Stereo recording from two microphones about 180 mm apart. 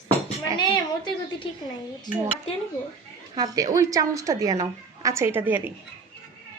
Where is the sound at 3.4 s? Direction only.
20° right (ahead or behind).